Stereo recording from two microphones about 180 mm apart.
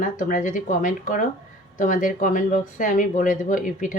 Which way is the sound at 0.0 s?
45° left (ahead or behind).